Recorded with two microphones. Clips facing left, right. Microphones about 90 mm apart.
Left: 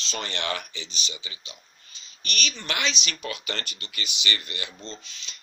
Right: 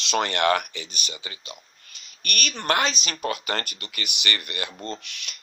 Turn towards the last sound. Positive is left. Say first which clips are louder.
# right 6 dB
turn(degrees=-70)  # may be behind; listen again after turning